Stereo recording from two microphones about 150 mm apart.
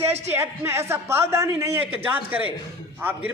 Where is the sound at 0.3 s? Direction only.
15° right (ahead or behind).